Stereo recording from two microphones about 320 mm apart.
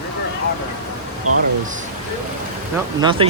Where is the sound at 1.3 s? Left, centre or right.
Right.